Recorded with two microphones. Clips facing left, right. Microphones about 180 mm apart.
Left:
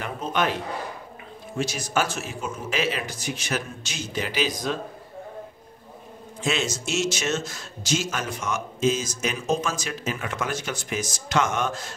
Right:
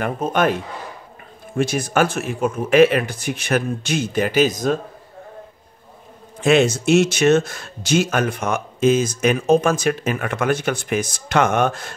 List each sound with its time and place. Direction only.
0.0 s a man's voice: 50° right (ahead or behind)
1.6 s speech: 55° right (ahead or behind)
6.4 s speech: 60° right (ahead or behind)